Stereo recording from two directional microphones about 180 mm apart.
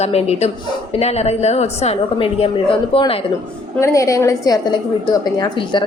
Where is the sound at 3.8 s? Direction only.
20° left (ahead or behind).